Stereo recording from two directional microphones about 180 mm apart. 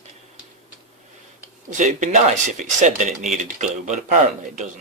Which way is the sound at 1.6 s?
45° right (ahead or behind).